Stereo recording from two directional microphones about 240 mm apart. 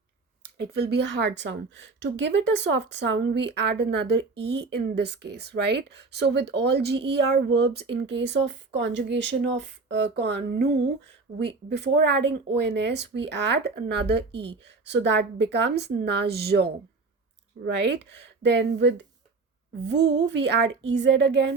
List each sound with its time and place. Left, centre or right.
0.5 s speech: right
17.7 s speech: right